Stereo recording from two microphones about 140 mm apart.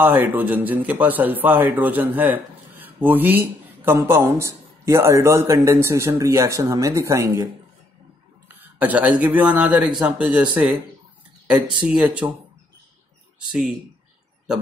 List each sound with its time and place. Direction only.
0.0 s a man's voice: 15° right (ahead or behind)
8.5 s a sound: 10° right (ahead or behind)
9.2 s a man's voice: 10° right (ahead or behind)
13.4 s speech: 5° right (ahead or behind)